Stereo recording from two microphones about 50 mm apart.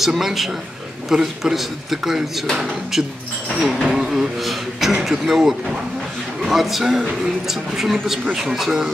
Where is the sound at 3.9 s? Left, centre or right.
Centre.